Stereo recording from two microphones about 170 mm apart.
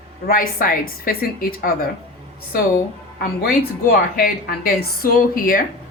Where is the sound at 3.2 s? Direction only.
60° left (ahead or behind).